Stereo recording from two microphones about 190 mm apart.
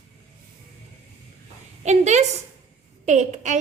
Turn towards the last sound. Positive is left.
turn(degrees=-40)  # may be behind; listen again after turning